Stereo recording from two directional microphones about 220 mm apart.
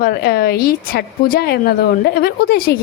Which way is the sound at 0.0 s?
45° left (ahead or behind).